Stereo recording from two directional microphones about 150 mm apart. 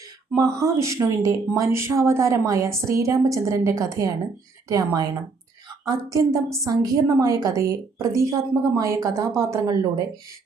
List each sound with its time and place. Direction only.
0.3 s speech: 20° right (ahead or behind)